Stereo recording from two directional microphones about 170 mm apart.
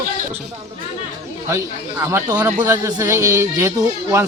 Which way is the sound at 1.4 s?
15° right (ahead or behind).